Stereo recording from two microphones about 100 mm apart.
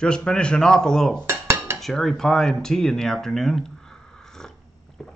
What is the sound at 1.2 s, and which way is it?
Dishes, 25° right (ahead or behind).